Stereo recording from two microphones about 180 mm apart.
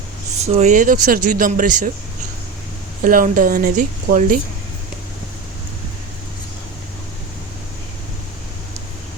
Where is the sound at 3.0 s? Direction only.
50° right (ahead or behind).